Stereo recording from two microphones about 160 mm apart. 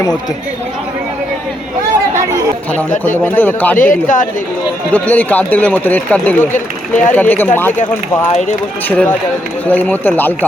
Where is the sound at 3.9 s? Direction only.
55° left (ahead or behind).